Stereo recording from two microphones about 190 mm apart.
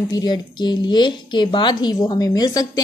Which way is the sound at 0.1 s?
20° left (ahead or behind).